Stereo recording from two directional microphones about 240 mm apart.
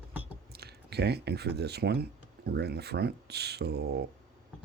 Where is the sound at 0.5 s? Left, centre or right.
Right.